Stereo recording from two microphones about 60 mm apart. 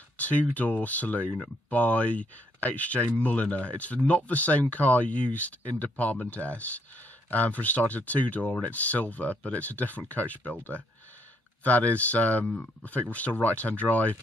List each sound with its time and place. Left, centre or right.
0.2 s speech: left